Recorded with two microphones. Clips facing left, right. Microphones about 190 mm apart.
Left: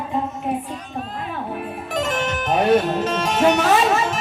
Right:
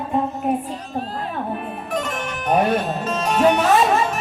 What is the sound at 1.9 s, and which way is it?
Music, 90° left.